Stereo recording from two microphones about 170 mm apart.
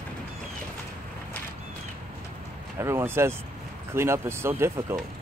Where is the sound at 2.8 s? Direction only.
15° right (ahead or behind).